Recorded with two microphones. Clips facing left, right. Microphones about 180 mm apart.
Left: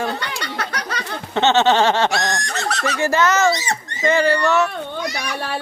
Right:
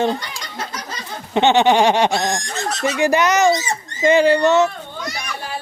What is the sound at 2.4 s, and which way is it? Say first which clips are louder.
Speech: left 1 dB; 70° left (ahead or behind).